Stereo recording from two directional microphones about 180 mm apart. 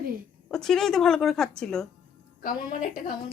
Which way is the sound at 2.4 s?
50° left (ahead or behind).